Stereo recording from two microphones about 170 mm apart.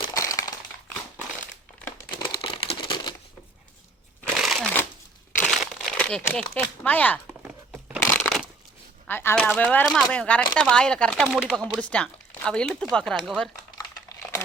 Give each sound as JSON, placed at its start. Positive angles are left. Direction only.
{"t": 0.0, "sound": "crumpling", "side_deg": 20}
{"t": 2.0, "sound": "crumpling", "side_deg": 25}
{"t": 4.4, "sound": "a sound", "side_deg": 0}
{"t": 5.4, "sound": "crumpling", "side_deg": 5}
{"t": 6.8, "sound": "speech", "side_deg": 10}
{"t": 7.3, "sound": "a sound", "side_deg": -10}
{"t": 8.1, "sound": "crushing", "side_deg": 0}
{"t": 9.0, "sound": "speech", "side_deg": 10}